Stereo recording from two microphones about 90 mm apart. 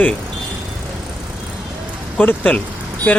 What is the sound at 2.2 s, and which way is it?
Speech, 20° left (ahead or behind).